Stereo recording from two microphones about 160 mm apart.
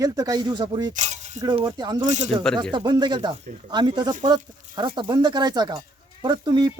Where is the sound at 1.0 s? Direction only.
45° right (ahead or behind).